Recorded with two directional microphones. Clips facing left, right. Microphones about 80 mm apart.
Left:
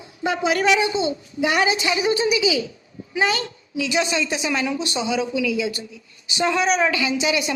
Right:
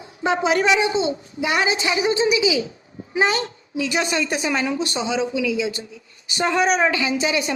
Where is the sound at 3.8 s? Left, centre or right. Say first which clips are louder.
Even; right.